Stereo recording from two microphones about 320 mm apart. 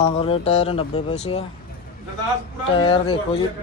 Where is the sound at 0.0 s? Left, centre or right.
Centre.